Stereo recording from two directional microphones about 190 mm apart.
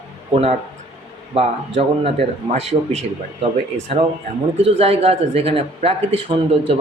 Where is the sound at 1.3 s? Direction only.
30° right (ahead or behind).